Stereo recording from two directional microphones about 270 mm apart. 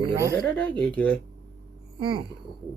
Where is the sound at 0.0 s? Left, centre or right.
Centre.